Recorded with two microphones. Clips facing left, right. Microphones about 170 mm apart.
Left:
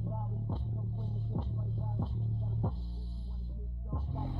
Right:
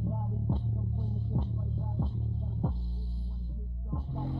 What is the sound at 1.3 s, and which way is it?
Music, centre (ahead or behind).